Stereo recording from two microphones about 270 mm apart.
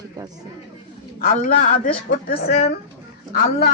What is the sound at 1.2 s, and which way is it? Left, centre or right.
Speech, left.